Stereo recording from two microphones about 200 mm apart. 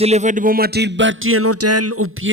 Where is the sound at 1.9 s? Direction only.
90° right.